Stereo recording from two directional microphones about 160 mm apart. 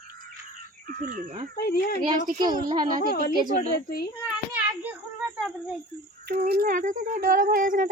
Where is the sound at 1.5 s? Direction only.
75° left (ahead or behind).